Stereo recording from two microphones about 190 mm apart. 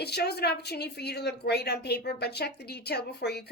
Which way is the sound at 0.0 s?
60° left (ahead or behind).